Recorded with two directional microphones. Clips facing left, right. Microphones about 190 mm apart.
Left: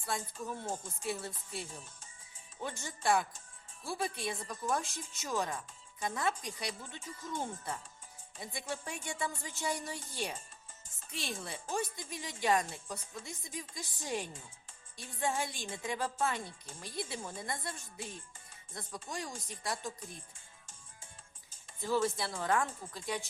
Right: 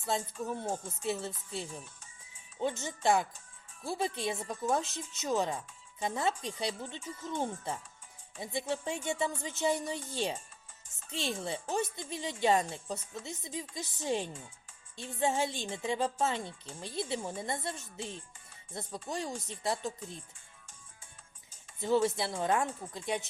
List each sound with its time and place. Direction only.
0.1 s speech: 25° right (ahead or behind)
21.8 s speech: 25° right (ahead or behind)